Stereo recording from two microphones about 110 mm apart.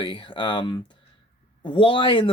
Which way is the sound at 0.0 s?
50° left (ahead or behind).